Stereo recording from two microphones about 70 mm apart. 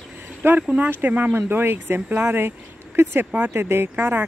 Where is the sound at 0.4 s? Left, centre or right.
Right.